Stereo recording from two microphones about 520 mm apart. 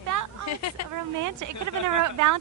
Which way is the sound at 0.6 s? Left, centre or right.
Left.